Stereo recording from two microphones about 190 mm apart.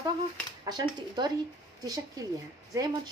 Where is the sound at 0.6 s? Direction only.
20° right (ahead or behind).